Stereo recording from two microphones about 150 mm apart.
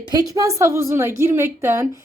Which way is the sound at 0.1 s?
25° right (ahead or behind).